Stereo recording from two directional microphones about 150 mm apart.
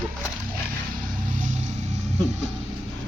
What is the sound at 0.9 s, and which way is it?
Music, 65° right (ahead or behind).